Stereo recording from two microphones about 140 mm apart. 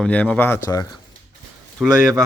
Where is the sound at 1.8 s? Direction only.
Centre (ahead or behind).